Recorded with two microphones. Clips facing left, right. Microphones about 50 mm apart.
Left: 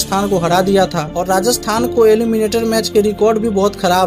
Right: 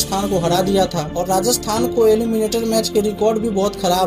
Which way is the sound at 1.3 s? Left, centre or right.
Left.